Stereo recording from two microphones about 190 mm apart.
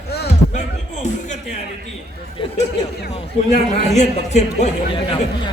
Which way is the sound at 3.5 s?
35° left (ahead or behind).